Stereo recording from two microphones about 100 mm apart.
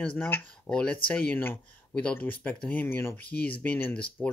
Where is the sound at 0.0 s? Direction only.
10° left (ahead or behind).